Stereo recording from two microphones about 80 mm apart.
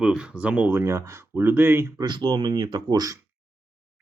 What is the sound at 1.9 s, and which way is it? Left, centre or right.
Speech, right.